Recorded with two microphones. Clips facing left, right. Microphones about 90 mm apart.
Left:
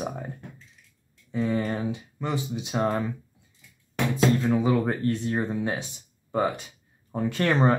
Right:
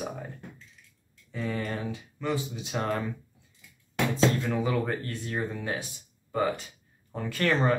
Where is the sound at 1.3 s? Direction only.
20° left (ahead or behind).